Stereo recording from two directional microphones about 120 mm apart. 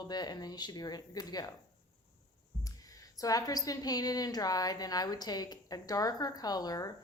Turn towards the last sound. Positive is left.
turn(degrees=30)  # may be behind; listen again after turning